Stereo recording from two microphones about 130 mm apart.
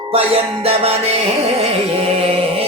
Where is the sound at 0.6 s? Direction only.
50° right (ahead or behind).